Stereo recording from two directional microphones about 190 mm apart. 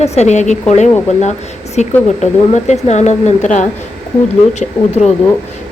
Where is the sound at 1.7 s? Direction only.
35° left (ahead or behind).